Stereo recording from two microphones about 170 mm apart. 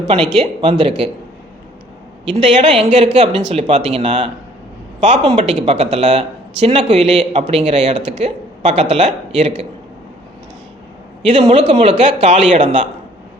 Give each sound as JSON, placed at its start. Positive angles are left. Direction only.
{"t": 0.3, "sound": "speech", "side_deg": -35}
{"t": 2.3, "sound": "a man's voice", "side_deg": -30}
{"t": 11.3, "sound": "speech", "side_deg": -40}